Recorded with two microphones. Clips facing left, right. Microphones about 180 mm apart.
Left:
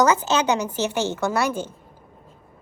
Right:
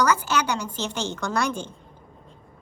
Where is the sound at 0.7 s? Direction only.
10° left (ahead or behind).